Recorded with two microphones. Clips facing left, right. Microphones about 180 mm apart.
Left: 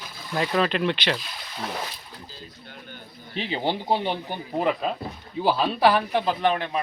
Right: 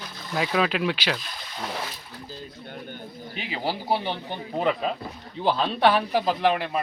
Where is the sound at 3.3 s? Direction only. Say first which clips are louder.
Left 4 dB; 30° left (ahead or behind).